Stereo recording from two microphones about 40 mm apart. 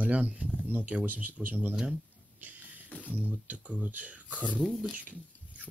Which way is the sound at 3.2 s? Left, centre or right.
Right.